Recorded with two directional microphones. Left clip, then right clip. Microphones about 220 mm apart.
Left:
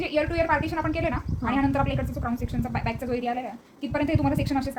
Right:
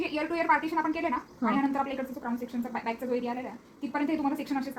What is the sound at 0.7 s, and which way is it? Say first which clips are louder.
A woman's voice: left 2 dB; 30° left (ahead or behind).